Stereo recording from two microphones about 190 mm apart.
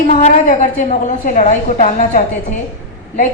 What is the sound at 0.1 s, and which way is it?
A woman's voice, 35° left (ahead or behind).